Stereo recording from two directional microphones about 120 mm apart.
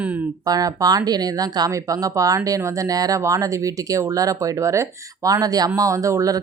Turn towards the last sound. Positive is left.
turn(degrees=-25)  # may be behind; listen again after turning